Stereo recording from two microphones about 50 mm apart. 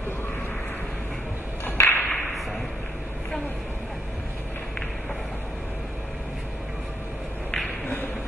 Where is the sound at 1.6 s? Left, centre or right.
Left.